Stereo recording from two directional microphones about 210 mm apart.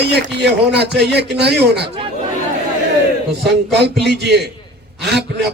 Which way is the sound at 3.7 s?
55° right (ahead or behind).